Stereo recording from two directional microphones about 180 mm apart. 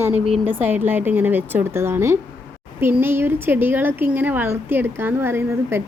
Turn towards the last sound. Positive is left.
turn(degrees=-15)  # may be behind; listen again after turning